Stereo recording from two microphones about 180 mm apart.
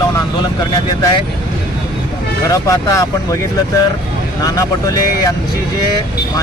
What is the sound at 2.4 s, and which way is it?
Speech, 15° left (ahead or behind).